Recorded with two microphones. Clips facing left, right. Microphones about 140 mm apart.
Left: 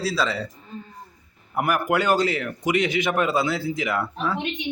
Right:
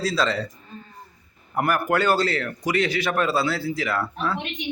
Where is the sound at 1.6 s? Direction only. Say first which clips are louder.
Even; 10° left (ahead or behind).